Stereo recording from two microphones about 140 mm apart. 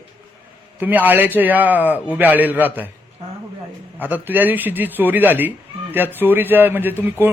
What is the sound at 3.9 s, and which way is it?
A man's voice, 15° right (ahead or behind).